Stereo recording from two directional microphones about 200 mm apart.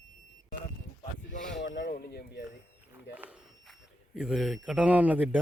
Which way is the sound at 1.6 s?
60° left (ahead or behind).